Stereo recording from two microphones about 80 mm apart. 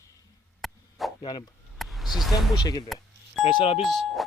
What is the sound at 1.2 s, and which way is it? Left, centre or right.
Speech, left.